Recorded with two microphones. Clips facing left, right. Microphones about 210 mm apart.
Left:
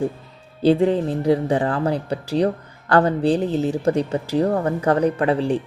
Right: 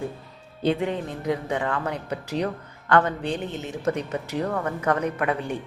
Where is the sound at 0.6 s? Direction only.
35° left (ahead or behind).